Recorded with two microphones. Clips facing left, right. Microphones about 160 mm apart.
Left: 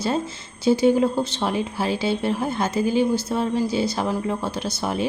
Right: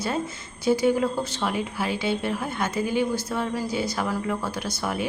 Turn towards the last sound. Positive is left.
turn(degrees=25)  # may be behind; listen again after turning